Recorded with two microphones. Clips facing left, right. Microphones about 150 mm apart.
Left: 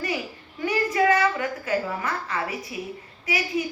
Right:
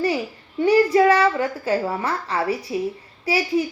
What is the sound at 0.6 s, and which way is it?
A child's voice, 35° right (ahead or behind).